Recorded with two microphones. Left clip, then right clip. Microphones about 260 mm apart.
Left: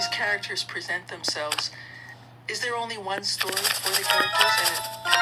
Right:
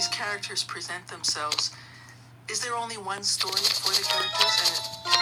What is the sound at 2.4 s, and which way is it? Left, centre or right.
Speech, centre.